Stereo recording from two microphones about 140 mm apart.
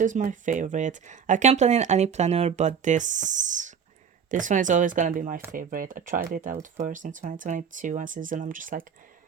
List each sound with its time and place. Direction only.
0.0 s speech: 65° right (ahead or behind)
5.5 s speech: 80° right